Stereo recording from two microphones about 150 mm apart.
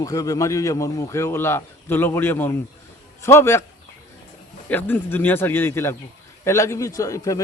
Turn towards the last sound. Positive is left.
turn(degrees=20)  # may be behind; listen again after turning